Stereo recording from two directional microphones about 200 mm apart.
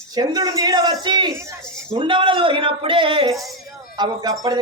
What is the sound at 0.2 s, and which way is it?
A man's voice, 20° right (ahead or behind).